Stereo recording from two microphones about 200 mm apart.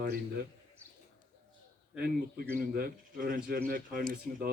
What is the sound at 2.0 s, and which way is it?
Speech, 50° right (ahead or behind).